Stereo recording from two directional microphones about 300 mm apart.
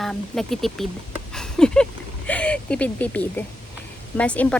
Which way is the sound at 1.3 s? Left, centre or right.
Centre.